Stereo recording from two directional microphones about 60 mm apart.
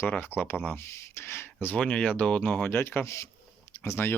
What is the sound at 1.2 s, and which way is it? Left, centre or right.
Speech, left.